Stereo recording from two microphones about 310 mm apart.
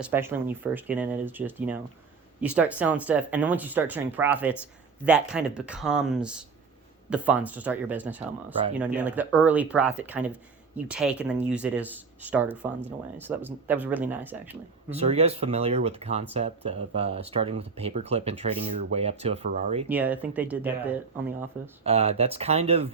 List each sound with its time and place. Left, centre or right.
0.0 s speech: centre
14.9 s speech: centre
19.9 s speech: centre
21.8 s speech: centre